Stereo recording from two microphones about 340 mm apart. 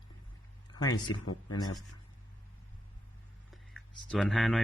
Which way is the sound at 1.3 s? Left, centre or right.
Left.